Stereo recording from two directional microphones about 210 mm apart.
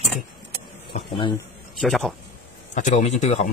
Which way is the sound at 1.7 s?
Centre (ahead or behind).